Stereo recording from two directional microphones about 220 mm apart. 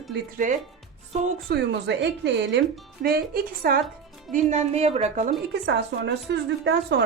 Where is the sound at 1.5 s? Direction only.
50° right (ahead or behind).